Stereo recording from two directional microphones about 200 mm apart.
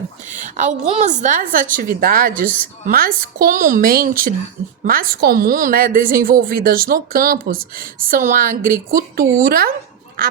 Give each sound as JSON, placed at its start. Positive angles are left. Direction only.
{"t": 0.3, "sound": "a woman's voice", "side_deg": -40}